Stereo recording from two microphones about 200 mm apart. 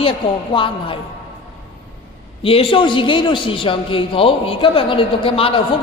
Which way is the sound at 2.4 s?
30° left (ahead or behind).